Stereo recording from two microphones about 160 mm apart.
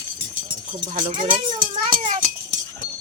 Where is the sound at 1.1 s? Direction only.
30° right (ahead or behind).